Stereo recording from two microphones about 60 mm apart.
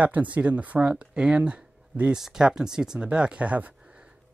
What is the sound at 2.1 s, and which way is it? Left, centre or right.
Speech, centre.